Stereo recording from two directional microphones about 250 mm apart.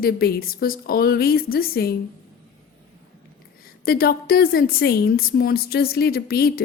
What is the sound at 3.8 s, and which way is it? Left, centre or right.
Speech, left.